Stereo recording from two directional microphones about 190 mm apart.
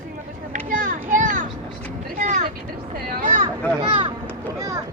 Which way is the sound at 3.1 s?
45° right (ahead or behind).